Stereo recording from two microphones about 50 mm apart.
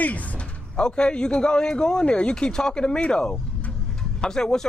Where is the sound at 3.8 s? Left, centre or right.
Centre.